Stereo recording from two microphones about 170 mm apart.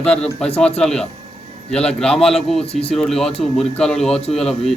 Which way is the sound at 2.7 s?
35° left (ahead or behind).